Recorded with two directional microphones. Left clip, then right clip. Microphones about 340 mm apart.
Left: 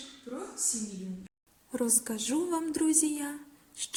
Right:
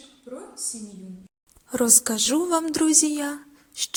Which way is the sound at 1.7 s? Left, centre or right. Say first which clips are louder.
Right 10 dB; right.